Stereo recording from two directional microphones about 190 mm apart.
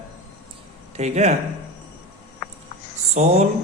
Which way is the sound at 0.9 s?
35° right (ahead or behind).